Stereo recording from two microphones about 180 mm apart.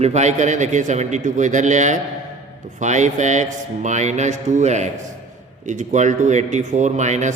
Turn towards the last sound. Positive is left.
turn(degrees=-40)  # may be behind; listen again after turning